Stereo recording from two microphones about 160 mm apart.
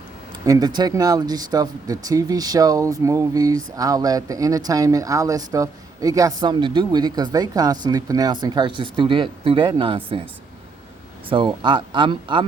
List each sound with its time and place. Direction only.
0.4 s speech: 25° right (ahead or behind)
11.3 s speech: 30° right (ahead or behind)